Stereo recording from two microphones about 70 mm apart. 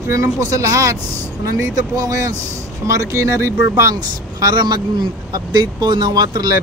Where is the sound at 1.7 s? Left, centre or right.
Right.